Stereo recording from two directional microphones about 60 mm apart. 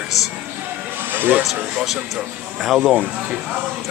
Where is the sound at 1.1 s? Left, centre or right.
Right.